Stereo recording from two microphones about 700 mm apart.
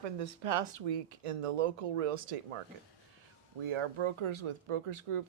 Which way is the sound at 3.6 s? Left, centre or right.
Right.